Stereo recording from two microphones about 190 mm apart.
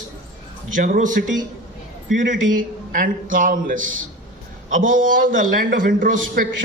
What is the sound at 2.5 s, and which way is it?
Speech, 45° right (ahead or behind).